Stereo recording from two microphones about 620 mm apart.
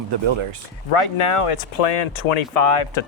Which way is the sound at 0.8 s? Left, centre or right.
Left.